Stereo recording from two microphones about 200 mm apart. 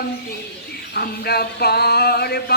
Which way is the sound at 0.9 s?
50° left (ahead or behind).